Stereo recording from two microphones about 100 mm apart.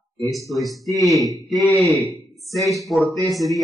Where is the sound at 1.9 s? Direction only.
Centre (ahead or behind).